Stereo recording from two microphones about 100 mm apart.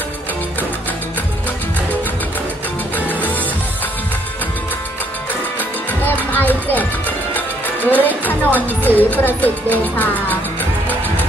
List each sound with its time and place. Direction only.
3.1 s music: 15° left (ahead or behind)
6.0 s music: 15° left (ahead or behind)